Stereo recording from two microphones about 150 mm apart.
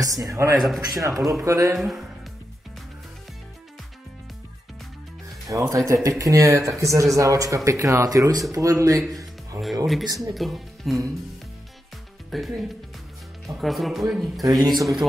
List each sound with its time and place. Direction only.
0.0 s speech: 20° right (ahead or behind)
1.8 s a man's voice: centre (ahead or behind)
5.5 s speech: 20° right (ahead or behind)
10.3 s a man's voice: centre (ahead or behind)
12.3 s a man's voice: centre (ahead or behind)
14.4 s speech: 25° right (ahead or behind)